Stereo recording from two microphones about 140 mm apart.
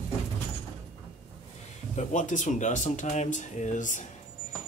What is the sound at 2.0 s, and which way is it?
Speech, 60° left (ahead or behind).